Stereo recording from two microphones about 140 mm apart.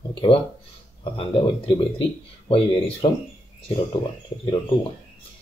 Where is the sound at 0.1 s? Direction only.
35° left (ahead or behind).